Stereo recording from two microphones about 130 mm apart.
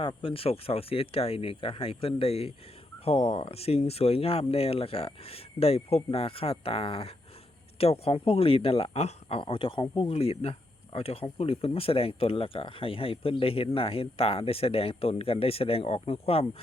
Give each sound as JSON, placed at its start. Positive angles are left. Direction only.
{"t": 0.0, "sound": "speech", "side_deg": 40}